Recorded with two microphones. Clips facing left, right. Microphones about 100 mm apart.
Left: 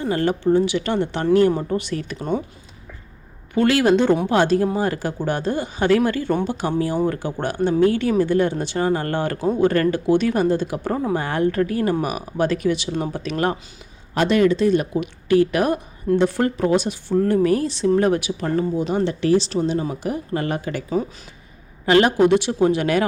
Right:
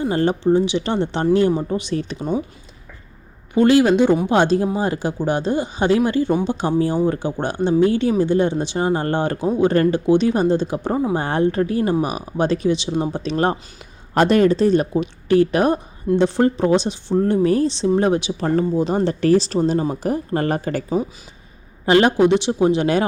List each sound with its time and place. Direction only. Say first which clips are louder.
0.0 s speech: right 2 dB; 25° right (ahead or behind)
3.5 s speech: right 3 dB; 20° right (ahead or behind)
9.4 s speech: right 1 dB; 15° right (ahead or behind)
14.1 s speech: right 2 dB; 45° right (ahead or behind)
21.8 s speech: right 1 dB; 25° right (ahead or behind)